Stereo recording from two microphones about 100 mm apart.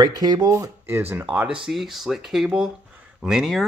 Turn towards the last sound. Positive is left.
turn(degrees=-5)  # may be behind; listen again after turning